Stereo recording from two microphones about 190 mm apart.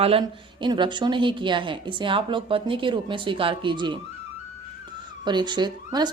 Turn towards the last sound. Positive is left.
turn(degrees=-20)  # may be behind; listen again after turning